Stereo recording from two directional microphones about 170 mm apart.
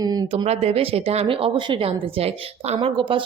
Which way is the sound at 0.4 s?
40° right (ahead or behind).